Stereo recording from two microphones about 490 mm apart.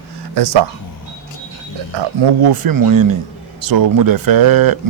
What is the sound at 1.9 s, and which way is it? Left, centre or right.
Speech, right.